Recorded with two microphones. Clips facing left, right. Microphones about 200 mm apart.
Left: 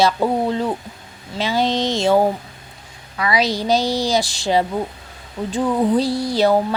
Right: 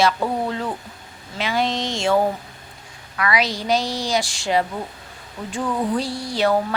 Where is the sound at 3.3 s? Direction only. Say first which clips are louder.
Left 4 dB; 35° left (ahead or behind).